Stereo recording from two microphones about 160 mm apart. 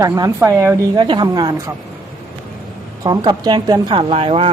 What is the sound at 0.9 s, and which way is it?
Speech, 30° right (ahead or behind).